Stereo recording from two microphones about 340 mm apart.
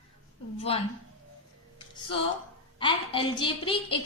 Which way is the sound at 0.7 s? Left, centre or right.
Centre.